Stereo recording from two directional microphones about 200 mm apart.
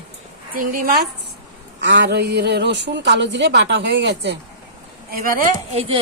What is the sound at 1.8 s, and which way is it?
A woman's voice, 60° right (ahead or behind).